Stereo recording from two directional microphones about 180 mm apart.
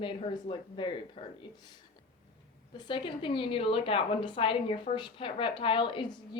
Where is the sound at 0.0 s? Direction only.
30° left (ahead or behind).